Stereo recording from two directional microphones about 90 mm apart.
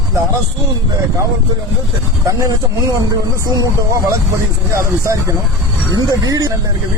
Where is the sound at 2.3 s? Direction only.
40° right (ahead or behind).